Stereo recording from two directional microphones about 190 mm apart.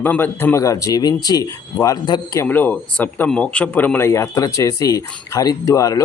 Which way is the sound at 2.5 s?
10° left (ahead or behind).